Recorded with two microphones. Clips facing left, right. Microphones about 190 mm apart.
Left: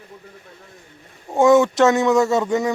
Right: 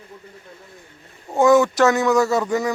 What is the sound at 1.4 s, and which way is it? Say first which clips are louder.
A man's voice: left 1 dB; 25° left (ahead or behind).